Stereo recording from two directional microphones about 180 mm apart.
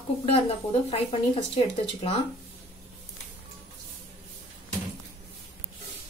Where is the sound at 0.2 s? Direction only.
30° left (ahead or behind).